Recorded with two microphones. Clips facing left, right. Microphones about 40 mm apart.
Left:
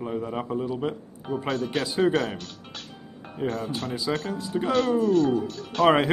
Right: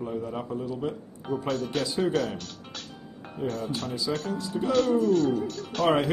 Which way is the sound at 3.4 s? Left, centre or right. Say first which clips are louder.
Left 2 dB; centre.